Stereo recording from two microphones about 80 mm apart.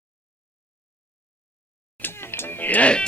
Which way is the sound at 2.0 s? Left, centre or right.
Left.